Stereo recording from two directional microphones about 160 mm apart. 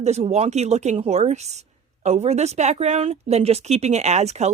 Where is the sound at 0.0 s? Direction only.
45° right (ahead or behind).